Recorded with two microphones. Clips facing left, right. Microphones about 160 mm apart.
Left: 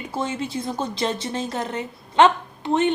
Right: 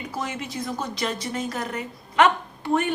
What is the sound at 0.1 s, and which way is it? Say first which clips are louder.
A woman's voice: left 6 dB; 30° left (ahead or behind).